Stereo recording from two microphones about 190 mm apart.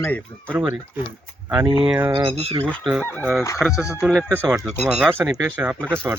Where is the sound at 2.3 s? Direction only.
30° right (ahead or behind).